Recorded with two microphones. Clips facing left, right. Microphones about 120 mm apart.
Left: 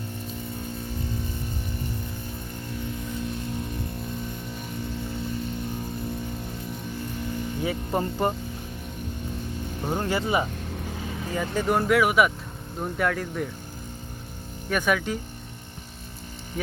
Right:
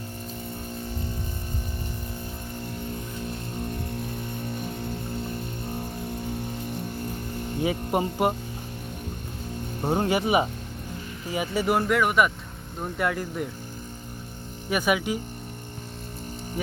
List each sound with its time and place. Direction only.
7.6 s speech: 15° right (ahead or behind)
10.0 s speech: 15° right (ahead or behind)
11.3 s speech: 5° right (ahead or behind)
14.7 s speech: 10° right (ahead or behind)